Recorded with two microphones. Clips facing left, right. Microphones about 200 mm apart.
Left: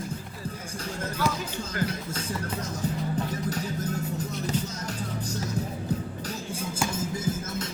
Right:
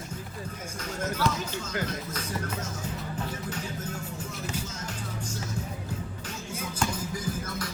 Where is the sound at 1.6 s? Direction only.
30° left (ahead or behind).